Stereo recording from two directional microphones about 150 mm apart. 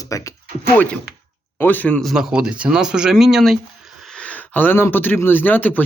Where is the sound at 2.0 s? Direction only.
5° right (ahead or behind).